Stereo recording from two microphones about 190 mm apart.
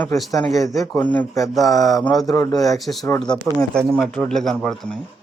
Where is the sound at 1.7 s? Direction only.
20° left (ahead or behind).